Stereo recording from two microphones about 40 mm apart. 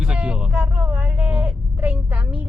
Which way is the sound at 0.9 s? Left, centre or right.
Right.